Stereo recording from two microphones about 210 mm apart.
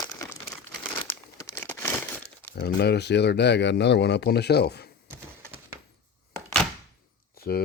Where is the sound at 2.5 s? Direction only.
50° left (ahead or behind).